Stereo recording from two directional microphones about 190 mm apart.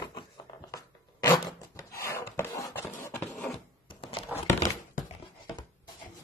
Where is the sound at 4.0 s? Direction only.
30° left (ahead or behind).